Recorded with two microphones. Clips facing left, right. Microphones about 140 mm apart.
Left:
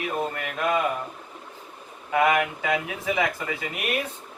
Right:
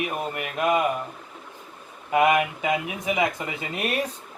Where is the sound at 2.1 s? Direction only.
20° right (ahead or behind).